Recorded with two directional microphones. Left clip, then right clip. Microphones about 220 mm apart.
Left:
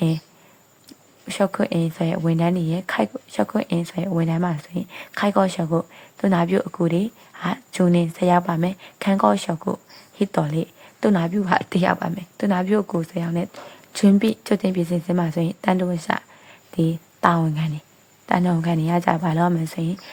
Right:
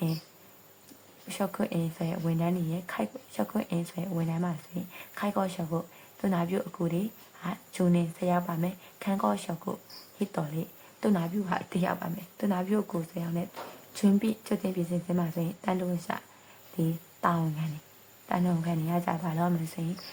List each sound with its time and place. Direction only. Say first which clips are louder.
1.3 s a woman's voice: left 11 dB; 30° left (ahead or behind)